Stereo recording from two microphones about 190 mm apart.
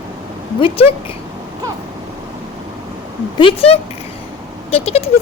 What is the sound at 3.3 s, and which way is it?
Speech, 30° left (ahead or behind).